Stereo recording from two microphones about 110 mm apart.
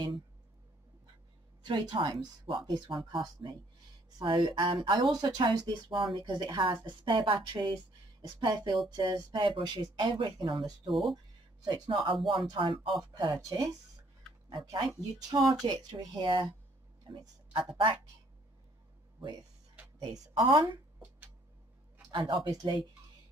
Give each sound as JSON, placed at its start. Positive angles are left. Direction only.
{"t": 1.6, "sound": "speech", "side_deg": -45}
{"t": 10.9, "sound": "speech", "side_deg": 0}
{"t": 11.6, "sound": "speech", "side_deg": -45}
{"t": 19.1, "sound": "speech", "side_deg": -35}
{"t": 20.0, "sound": "a woman's voice", "side_deg": -50}
{"t": 22.1, "sound": "speech", "side_deg": -45}
{"t": 22.5, "sound": "speech", "side_deg": -35}